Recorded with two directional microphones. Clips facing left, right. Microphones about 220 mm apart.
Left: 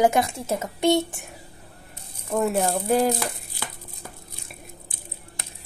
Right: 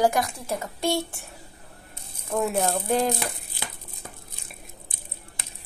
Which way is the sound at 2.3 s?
Centre (ahead or behind).